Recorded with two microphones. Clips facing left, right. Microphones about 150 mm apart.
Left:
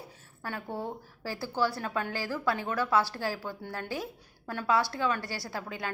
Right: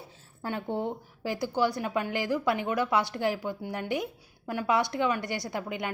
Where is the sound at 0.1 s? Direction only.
25° right (ahead or behind).